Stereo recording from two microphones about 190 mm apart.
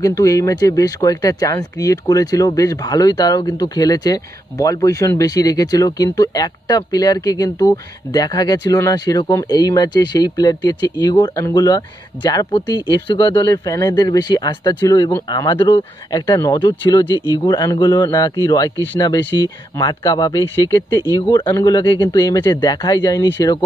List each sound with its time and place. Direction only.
0.0 s speech: 15° left (ahead or behind)